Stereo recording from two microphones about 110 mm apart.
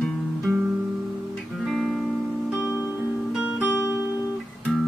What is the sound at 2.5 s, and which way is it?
Music, 30° left (ahead or behind).